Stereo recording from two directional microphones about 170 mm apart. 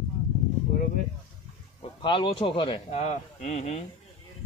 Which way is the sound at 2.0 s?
30° left (ahead or behind).